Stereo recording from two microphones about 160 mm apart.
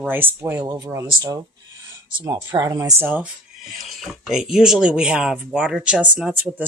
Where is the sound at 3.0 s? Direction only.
10° right (ahead or behind).